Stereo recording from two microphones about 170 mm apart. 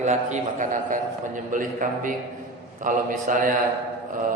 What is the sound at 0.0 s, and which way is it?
A man's voice, 45° right (ahead or behind).